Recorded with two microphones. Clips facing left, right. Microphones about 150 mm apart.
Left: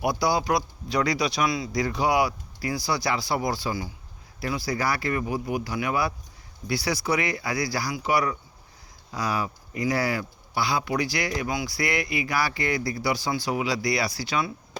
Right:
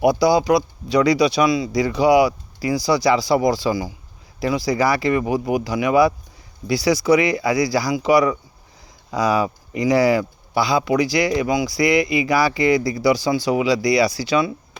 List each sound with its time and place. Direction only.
0.0 s speech: 90° right